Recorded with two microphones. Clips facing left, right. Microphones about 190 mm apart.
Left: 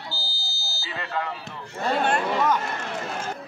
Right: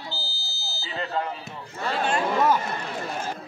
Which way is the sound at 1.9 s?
60° left (ahead or behind).